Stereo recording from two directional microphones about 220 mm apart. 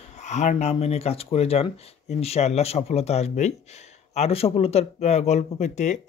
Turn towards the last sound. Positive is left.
turn(degrees=35)  # may be behind; listen again after turning